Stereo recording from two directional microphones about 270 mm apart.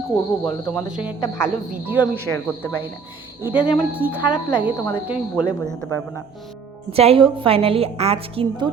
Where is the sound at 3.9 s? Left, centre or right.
Centre.